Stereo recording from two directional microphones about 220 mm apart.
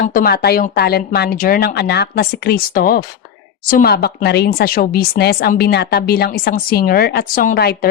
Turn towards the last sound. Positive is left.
turn(degrees=45)  # may be behind; listen again after turning